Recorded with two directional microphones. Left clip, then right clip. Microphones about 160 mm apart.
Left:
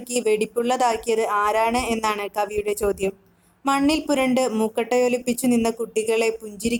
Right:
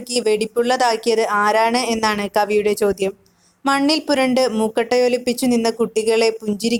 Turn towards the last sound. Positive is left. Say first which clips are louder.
# right 5 dB
turn(degrees=-35)  # may be behind; listen again after turning